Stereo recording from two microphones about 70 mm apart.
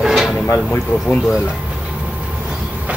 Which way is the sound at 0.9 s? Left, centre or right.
Left.